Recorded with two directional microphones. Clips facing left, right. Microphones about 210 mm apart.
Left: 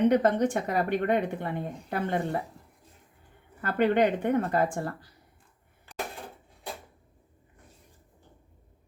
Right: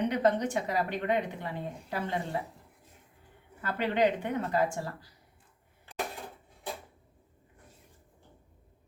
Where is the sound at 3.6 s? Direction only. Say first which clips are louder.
Left 4 dB; 55° left (ahead or behind).